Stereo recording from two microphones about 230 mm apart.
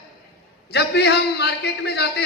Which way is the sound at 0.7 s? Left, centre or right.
Left.